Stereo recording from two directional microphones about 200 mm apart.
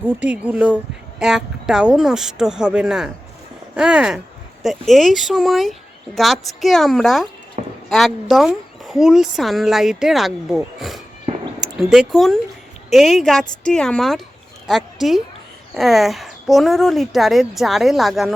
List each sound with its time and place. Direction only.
0.2 s a woman's voice: 5° right (ahead or behind)
11.3 s a sound: 35° right (ahead or behind)
11.6 s a woman's voice: centre (ahead or behind)